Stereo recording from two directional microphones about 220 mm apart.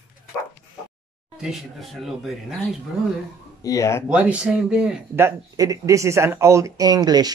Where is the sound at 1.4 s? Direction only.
Centre (ahead or behind).